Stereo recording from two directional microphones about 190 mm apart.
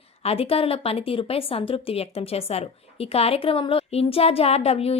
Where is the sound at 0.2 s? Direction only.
30° left (ahead or behind).